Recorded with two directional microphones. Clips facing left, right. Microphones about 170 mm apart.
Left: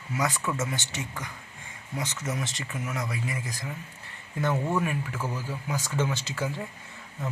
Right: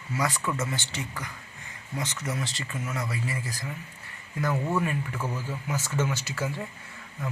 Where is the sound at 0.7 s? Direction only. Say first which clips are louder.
Even; 20° left (ahead or behind).